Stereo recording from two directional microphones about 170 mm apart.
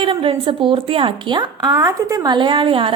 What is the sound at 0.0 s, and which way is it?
A woman's voice, 30° right (ahead or behind).